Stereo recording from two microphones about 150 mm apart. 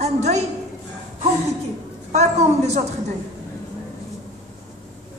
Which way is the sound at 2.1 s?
50° right (ahead or behind).